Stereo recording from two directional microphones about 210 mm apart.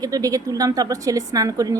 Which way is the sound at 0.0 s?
15° right (ahead or behind).